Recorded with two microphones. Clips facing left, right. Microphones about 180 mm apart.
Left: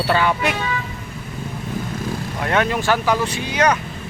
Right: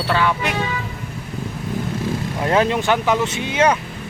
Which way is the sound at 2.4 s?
30° right (ahead or behind).